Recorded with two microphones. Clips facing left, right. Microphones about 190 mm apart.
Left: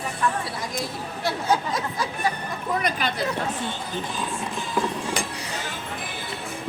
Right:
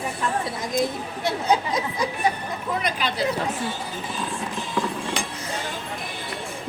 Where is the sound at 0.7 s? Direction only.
20° right (ahead or behind).